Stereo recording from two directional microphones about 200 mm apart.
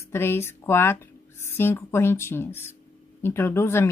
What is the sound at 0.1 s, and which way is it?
A woman's voice, 10° left (ahead or behind).